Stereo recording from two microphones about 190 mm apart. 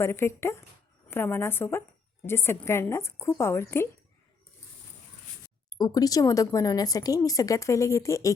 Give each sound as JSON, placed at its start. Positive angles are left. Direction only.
{"t": 0.0, "sound": "speech", "side_deg": 15}
{"t": 5.7, "sound": "speech", "side_deg": 20}